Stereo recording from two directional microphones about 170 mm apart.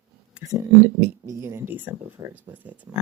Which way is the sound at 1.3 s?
15° right (ahead or behind).